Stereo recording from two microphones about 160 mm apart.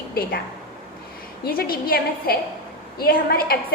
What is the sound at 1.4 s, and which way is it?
A woman's voice, 70° left (ahead or behind).